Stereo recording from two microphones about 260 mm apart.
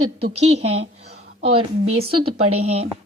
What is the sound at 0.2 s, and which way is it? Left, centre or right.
A woman's voice, right.